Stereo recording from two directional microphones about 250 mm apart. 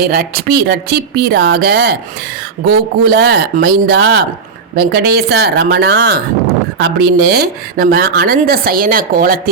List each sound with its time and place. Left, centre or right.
0.0 s a woman's voice: right